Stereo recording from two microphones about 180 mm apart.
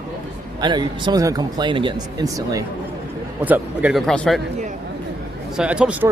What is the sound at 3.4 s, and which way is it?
A man's voice, 10° right (ahead or behind).